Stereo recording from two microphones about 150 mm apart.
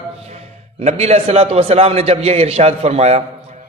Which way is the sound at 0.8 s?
45° right (ahead or behind).